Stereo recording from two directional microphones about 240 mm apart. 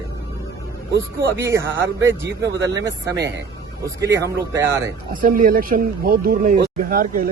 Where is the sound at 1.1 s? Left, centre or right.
Centre.